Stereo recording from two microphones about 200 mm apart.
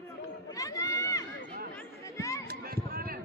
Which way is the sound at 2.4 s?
50° right (ahead or behind).